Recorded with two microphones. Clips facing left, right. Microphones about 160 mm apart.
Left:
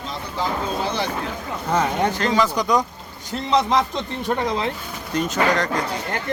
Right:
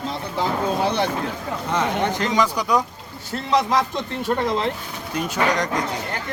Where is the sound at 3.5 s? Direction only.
20° left (ahead or behind).